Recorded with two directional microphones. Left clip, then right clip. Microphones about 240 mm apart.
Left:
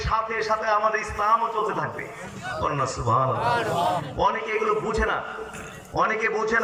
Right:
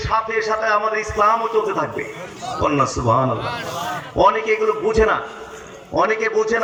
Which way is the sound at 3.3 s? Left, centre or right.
Left.